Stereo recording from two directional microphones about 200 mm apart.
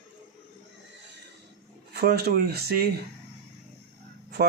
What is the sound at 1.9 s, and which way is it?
Speech, 55° right (ahead or behind).